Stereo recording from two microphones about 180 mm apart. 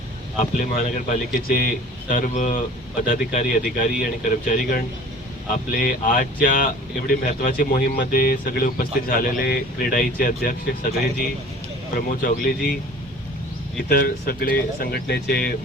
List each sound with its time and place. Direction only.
0.3 s speech: 45° left (ahead or behind)
11.9 s speech: 50° left (ahead or behind)
13.8 s speech: 55° left (ahead or behind)